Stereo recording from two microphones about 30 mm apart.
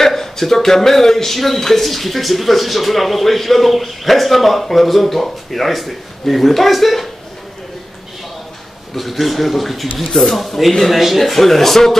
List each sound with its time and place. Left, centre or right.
0.0 s speech: centre
8.9 s speech: centre